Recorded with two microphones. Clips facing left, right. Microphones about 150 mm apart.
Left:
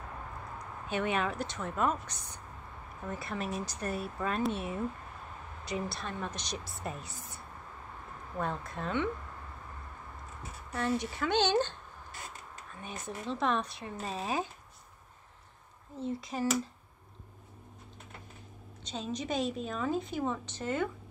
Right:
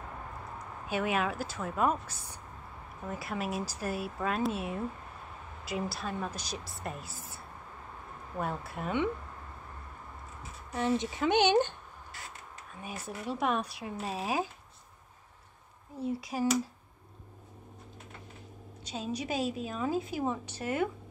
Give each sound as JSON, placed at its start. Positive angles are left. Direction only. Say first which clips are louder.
{"t": 0.8, "sound": "a woman's voice", "louder": "right 1 dB", "side_deg": -5}
{"t": 10.7, "sound": "a woman's voice", "louder": "right 2 dB", "side_deg": -20}
{"t": 12.8, "sound": "a woman's voice", "louder": "right 1 dB", "side_deg": -10}
{"t": 16.0, "sound": "a woman's voice", "louder": "right 2 dB", "side_deg": -10}
{"t": 18.9, "sound": "a woman's voice", "louder": "right 1 dB", "side_deg": -10}